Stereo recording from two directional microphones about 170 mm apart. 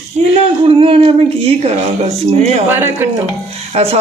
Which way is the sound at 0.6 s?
35° right (ahead or behind).